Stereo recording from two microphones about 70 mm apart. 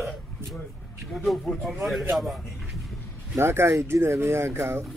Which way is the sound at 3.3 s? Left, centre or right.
Right.